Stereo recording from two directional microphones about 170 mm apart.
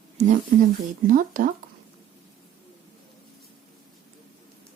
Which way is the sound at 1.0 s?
50° right (ahead or behind).